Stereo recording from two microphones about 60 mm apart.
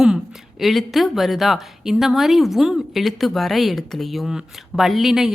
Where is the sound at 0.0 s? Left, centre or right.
Centre.